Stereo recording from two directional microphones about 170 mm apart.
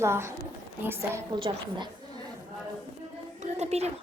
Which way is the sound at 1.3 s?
30° right (ahead or behind).